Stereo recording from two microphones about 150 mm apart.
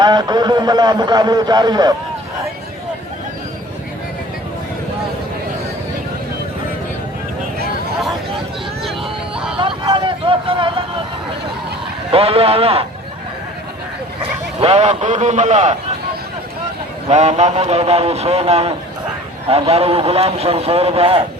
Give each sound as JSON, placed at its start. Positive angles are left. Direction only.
{"t": 0.0, "sound": "a man's voice", "side_deg": -25}
{"t": 8.8, "sound": "vehicle", "side_deg": -5}
{"t": 9.6, "sound": "vehicle", "side_deg": -30}
{"t": 12.1, "sound": "speech", "side_deg": -40}
{"t": 14.6, "sound": "a man's voice", "side_deg": -45}
{"t": 17.1, "sound": "a man's voice", "side_deg": -50}